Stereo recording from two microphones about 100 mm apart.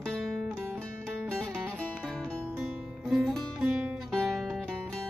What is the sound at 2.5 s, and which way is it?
Music, centre (ahead or behind).